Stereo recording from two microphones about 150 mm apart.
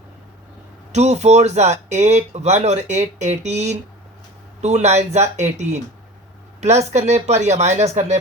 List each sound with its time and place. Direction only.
0.9 s speech: 50° right (ahead or behind)